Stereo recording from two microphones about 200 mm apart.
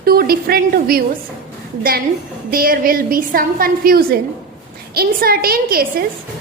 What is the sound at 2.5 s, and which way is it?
A woman's voice, 45° right (ahead or behind).